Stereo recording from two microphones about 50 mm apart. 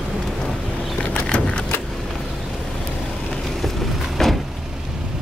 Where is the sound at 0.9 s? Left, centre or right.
Left.